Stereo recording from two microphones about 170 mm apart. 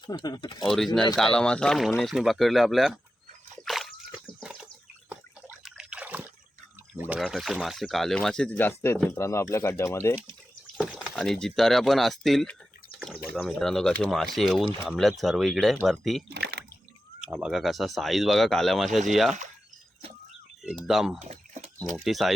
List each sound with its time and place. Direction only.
0.1 s speech: 25° left (ahead or behind)
1.1 s speech: 5° left (ahead or behind)
3.7 s splash: centre (ahead or behind)
4.4 s trickle: 5° right (ahead or behind)
7.1 s speech: centre (ahead or behind)
13.0 s a sound: centre (ahead or behind)
13.3 s speech: 5° left (ahead or behind)
16.3 s a sound: 75° right (ahead or behind)
17.2 s speech: 5° right (ahead or behind)
20.7 s speech: centre (ahead or behind)
21.2 s a sound: 40° right (ahead or behind)
21.9 s speech: centre (ahead or behind)